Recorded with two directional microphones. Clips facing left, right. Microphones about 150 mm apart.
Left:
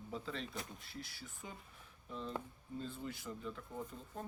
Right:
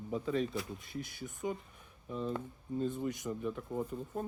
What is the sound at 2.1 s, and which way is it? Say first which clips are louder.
Speech: right 8 dB; 50° right (ahead or behind).